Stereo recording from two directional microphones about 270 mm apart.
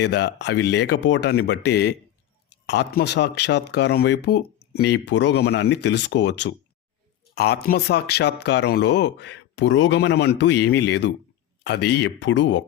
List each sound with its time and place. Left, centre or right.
0.0 s speech: left